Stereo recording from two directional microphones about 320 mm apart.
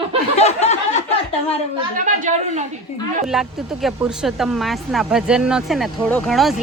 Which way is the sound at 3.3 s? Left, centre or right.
Centre.